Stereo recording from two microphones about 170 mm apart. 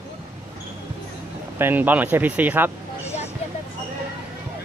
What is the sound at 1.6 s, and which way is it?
Speech, 10° right (ahead or behind).